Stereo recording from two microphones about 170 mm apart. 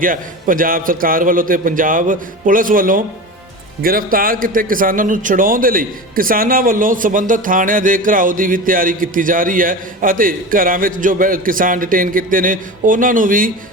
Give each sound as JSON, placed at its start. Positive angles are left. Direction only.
{"t": 0.0, "sound": "a man's voice", "side_deg": -55}